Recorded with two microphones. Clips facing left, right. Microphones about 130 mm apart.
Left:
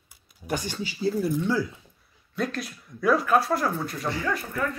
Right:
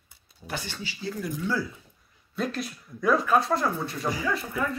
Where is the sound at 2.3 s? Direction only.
Centre (ahead or behind).